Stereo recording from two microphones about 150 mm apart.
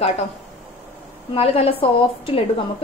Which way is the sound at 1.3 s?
40° left (ahead or behind).